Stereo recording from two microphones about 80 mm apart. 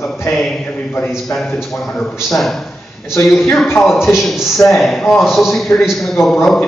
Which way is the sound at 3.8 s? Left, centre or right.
Centre.